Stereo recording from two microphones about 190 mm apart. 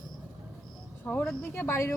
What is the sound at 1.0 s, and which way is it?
Speech, 5° left (ahead or behind).